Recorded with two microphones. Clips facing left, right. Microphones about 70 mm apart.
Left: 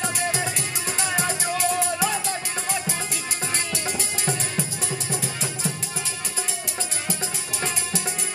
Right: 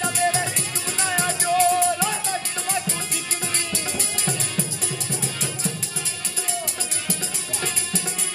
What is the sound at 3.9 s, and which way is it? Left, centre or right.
Music, left.